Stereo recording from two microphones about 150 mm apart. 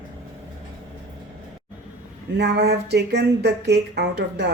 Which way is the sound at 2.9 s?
90° right.